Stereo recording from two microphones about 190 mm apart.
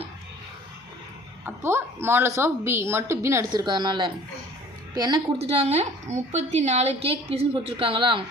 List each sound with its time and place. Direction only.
1.5 s a woman's voice: 10° right (ahead or behind)
5.4 s a woman's voice: 35° right (ahead or behind)